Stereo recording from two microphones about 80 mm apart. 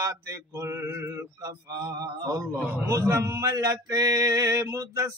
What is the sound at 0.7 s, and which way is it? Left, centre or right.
Mantra, right.